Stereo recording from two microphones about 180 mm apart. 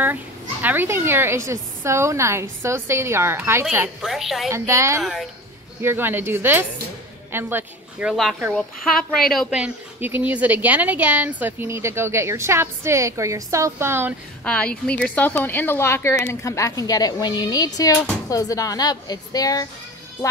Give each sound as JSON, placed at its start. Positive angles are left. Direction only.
{"t": 0.0, "sound": "a woman's voice", "side_deg": -10}
{"t": 4.5, "sound": "a woman's voice", "side_deg": -15}
{"t": 5.0, "sound": "a woman's voice", "side_deg": 0}
{"t": 5.8, "sound": "a woman's voice", "side_deg": -10}
{"t": 8.1, "sound": "a woman's voice", "side_deg": 0}
{"t": 14.4, "sound": "a woman's voice", "side_deg": 5}